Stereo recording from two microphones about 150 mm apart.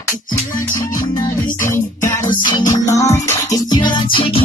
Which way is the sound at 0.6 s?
20° left (ahead or behind).